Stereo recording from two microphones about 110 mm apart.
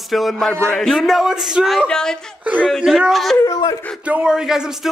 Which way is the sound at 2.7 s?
5° right (ahead or behind).